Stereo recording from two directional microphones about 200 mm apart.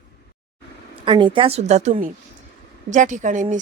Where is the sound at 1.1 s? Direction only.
25° right (ahead or behind).